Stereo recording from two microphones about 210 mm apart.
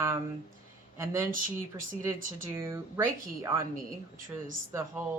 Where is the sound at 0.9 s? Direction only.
15° right (ahead or behind).